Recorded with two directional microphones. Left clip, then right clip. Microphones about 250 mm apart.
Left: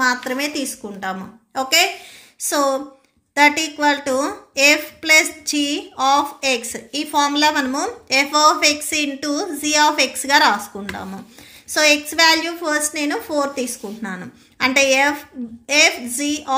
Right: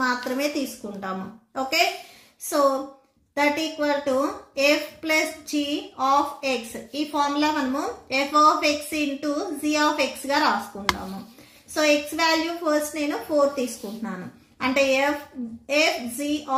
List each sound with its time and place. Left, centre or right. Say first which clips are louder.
1.0 s speech: left 6 dB; left
3.3 s a woman's voice: left 8 dB; left